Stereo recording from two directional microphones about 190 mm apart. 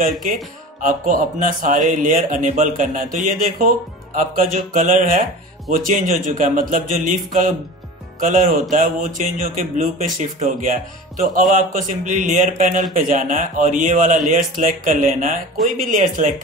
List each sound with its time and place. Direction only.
0.7 s speech: 45° right (ahead or behind)
8.2 s speech: 45° right (ahead or behind)